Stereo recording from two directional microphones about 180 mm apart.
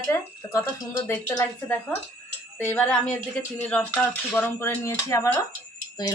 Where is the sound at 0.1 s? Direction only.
15° left (ahead or behind).